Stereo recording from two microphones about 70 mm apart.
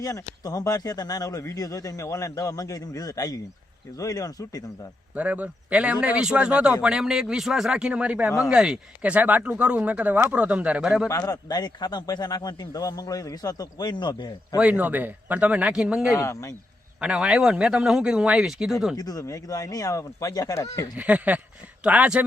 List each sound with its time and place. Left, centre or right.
0.0 s speech: left
5.1 s a man's voice: right
11.2 s a man's voice: left
14.6 s a man's voice: right; by 16.1 s centre
16.1 s speech: left
17.0 s a man's voice: centre
18.9 s speech: left
20.9 s speech: right